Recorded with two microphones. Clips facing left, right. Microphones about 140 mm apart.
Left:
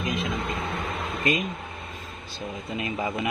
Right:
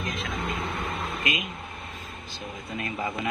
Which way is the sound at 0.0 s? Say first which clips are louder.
Left 5 dB; 15° left (ahead or behind).